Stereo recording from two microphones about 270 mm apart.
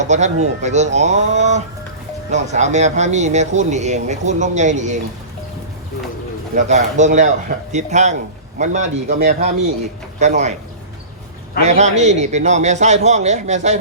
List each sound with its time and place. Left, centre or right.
0.0 s speech: right
6.5 s speech: right
11.6 s speech: right